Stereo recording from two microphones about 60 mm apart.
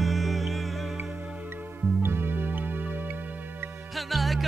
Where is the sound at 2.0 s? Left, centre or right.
Right.